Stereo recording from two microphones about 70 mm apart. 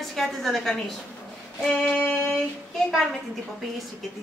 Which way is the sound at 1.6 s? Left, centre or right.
Centre.